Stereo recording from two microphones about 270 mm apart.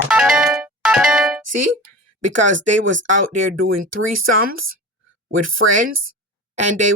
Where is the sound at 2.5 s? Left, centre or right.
Right.